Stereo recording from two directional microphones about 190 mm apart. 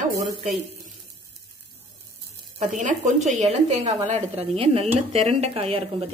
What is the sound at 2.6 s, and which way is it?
Speech, 40° right (ahead or behind).